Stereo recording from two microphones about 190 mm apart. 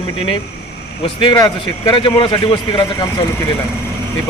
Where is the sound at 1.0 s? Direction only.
25° left (ahead or behind).